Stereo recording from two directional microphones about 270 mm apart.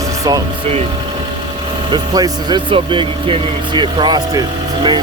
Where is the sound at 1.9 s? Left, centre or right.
Centre.